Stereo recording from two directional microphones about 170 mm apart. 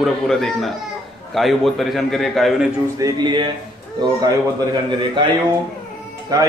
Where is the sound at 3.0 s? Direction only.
25° right (ahead or behind).